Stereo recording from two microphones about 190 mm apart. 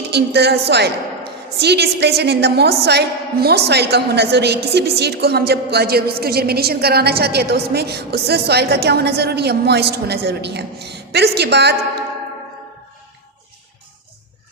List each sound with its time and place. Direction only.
0.1 s a woman's voice: 60° right (ahead or behind)